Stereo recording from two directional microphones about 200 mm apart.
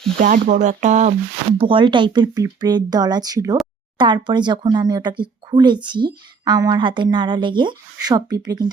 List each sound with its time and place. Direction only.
0.2 s speech: 40° right (ahead or behind)
1.5 s speech: 25° right (ahead or behind)